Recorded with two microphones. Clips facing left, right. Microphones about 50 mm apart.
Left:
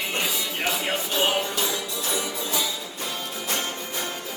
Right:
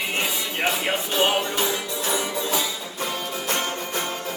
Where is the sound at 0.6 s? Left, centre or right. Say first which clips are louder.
Right 3 dB; centre.